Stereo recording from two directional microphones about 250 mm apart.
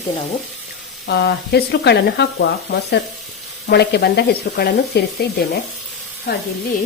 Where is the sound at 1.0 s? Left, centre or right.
Left.